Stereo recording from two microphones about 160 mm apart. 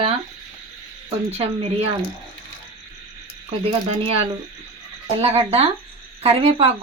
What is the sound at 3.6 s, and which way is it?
A woman's voice, 40° right (ahead or behind).